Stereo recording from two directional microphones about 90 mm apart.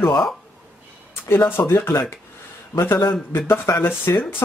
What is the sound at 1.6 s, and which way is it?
Speech, 30° left (ahead or behind).